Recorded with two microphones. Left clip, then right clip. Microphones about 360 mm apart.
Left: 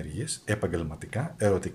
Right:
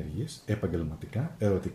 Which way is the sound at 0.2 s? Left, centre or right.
Centre.